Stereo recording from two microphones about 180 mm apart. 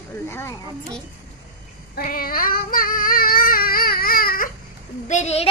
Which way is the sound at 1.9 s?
55° left (ahead or behind).